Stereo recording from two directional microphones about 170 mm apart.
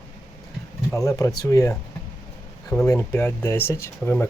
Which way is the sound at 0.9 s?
20° left (ahead or behind).